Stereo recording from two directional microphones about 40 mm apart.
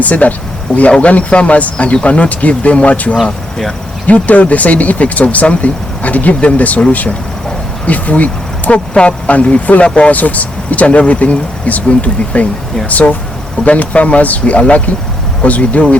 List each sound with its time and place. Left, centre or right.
0.0 s speech: left